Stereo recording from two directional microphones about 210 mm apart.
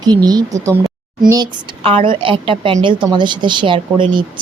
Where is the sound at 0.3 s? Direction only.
15° right (ahead or behind).